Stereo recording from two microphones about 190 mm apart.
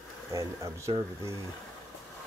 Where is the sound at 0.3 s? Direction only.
15° right (ahead or behind).